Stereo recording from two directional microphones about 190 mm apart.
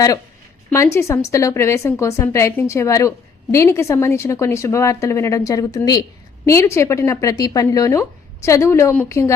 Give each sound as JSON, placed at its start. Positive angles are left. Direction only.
{"t": 0.7, "sound": "a woman's voice", "side_deg": 15}